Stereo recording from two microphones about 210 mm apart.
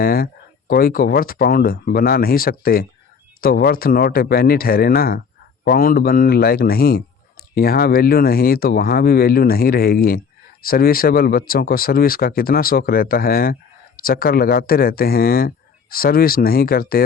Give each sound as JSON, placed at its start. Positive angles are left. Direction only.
{"t": 0.0, "sound": "speech", "side_deg": 45}